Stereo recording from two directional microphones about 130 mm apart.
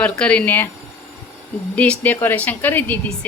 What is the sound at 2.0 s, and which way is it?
Speech, 15° left (ahead or behind).